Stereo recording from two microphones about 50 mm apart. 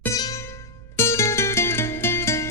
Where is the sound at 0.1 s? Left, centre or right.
Left.